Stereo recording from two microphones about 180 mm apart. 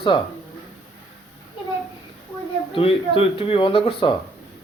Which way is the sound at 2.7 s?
30° left (ahead or behind).